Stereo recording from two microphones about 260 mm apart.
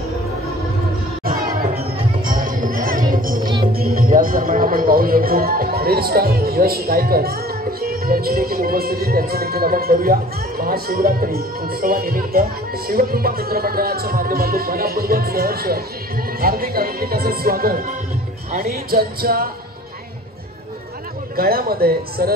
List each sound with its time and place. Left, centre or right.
1.2 s music: right
3.7 s speech: right
21.4 s speech: right